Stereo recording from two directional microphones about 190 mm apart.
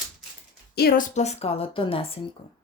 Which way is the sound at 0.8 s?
55° left (ahead or behind).